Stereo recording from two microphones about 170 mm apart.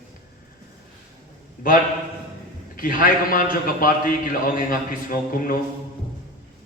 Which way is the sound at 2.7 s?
55° left (ahead or behind).